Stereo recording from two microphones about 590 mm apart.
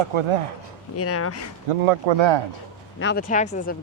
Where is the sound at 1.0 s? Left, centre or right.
Left.